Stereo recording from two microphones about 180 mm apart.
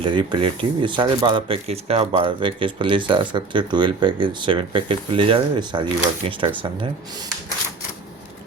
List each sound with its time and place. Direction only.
0.0 s speech: 25° right (ahead or behind)